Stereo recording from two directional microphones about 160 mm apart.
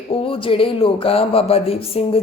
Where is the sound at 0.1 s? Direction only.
35° left (ahead or behind).